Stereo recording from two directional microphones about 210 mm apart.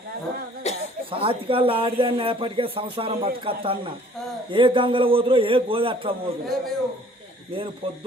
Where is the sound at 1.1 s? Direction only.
25° right (ahead or behind).